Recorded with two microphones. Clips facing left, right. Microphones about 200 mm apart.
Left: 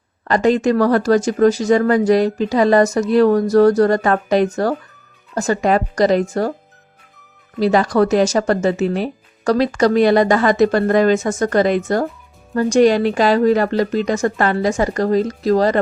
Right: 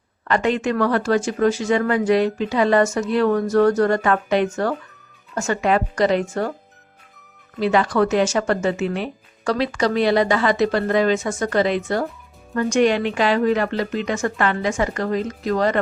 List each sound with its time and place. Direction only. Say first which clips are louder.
0.3 s speech: left 5 dB; 35° left (ahead or behind)
7.6 s speech: left 4 dB; 40° left (ahead or behind)